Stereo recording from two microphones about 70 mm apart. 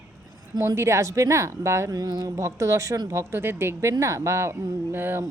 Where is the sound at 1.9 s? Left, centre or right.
Right.